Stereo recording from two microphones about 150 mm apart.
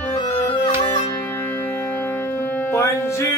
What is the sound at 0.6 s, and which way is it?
Music, 35° left (ahead or behind).